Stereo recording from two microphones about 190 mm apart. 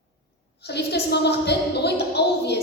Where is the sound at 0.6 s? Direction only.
60° left (ahead or behind).